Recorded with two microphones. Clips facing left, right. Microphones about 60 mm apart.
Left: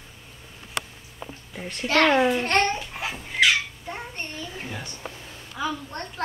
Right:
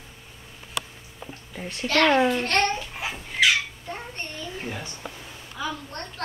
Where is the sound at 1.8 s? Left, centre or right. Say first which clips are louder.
Even; centre.